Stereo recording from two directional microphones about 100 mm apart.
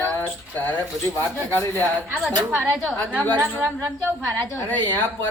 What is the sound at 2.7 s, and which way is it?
A woman's voice, 5° right (ahead or behind).